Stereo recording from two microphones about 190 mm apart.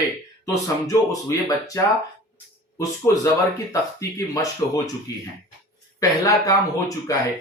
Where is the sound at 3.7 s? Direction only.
15° left (ahead or behind).